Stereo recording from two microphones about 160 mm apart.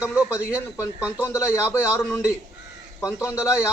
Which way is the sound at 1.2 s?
15° left (ahead or behind).